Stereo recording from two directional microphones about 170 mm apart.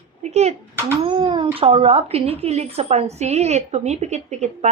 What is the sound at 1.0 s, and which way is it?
A woman's voice, 30° right (ahead or behind).